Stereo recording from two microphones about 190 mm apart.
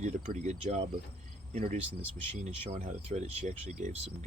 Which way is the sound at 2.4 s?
35° right (ahead or behind).